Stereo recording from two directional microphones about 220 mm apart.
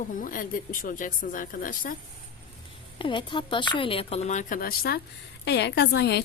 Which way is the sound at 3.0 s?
20° left (ahead or behind).